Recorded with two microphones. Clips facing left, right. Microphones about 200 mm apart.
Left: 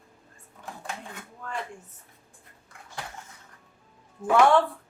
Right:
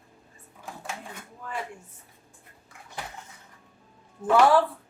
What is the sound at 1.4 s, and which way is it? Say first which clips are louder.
Speech: even; 5° right (ahead or behind).